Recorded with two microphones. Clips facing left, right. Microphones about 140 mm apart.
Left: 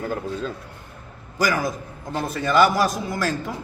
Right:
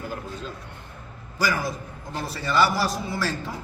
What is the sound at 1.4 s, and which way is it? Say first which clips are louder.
A man's voice: left 3 dB; 45° left (ahead or behind).